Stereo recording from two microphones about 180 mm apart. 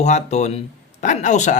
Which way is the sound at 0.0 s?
40° left (ahead or behind).